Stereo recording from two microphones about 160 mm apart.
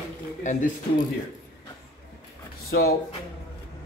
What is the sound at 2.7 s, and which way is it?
Speech, 70° left (ahead or behind).